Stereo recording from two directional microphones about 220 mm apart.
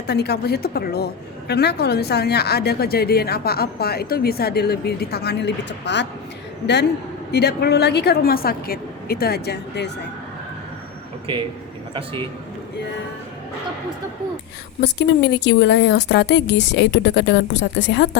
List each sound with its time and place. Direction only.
0.1 s a woman's voice: 50° left (ahead or behind)
7.3 s a woman's voice: 50° left (ahead or behind)
11.3 s a man's voice: 25° right (ahead or behind)
14.8 s a woman's voice: 50° left (ahead or behind)